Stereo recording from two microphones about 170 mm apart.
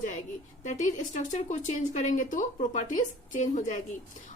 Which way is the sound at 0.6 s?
45° left (ahead or behind).